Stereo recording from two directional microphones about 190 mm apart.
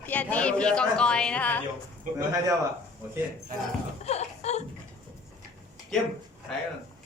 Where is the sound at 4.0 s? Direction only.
35° left (ahead or behind).